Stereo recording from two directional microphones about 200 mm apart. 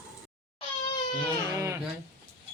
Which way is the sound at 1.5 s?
15° right (ahead or behind).